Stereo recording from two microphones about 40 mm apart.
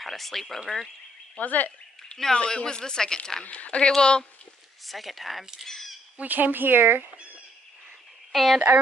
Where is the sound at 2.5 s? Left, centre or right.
Left.